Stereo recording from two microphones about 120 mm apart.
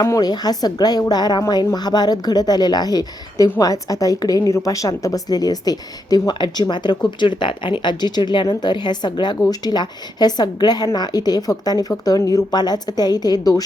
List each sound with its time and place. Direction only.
0.0 s a woman's voice: 30° left (ahead or behind)